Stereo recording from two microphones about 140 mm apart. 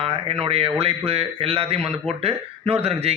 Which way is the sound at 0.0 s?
45° right (ahead or behind).